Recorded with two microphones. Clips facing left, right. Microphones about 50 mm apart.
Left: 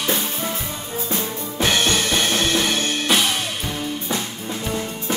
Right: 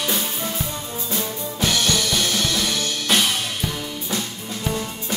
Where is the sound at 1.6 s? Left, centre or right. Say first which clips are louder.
Left 2 dB; left.